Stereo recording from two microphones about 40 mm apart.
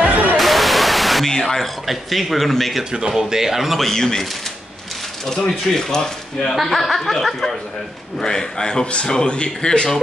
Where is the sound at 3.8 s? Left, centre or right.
Centre.